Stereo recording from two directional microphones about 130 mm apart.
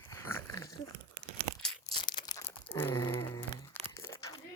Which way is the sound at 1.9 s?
35° left (ahead or behind).